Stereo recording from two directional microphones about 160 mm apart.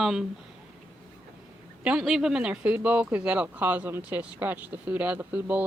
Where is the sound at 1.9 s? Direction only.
Centre (ahead or behind).